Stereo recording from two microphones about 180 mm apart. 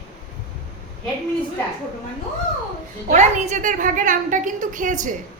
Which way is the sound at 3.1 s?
40° right (ahead or behind).